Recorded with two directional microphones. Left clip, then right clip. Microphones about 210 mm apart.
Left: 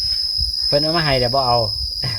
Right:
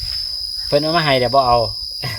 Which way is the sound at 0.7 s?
35° right (ahead or behind).